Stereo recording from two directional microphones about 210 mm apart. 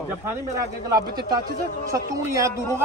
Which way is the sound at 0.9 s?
20° right (ahead or behind).